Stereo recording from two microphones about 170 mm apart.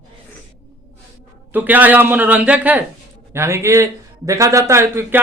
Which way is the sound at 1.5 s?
10° right (ahead or behind).